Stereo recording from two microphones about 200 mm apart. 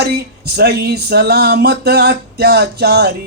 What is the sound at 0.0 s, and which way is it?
Speech, 55° right (ahead or behind).